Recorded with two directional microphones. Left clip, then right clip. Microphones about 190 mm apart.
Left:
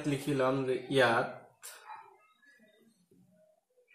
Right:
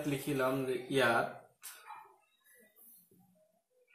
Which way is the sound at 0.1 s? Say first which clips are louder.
Left 4 dB; 20° left (ahead or behind).